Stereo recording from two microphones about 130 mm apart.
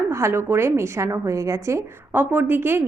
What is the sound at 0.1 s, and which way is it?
A woman's voice, 20° right (ahead or behind).